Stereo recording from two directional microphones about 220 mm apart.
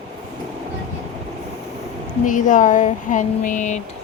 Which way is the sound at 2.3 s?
35° left (ahead or behind).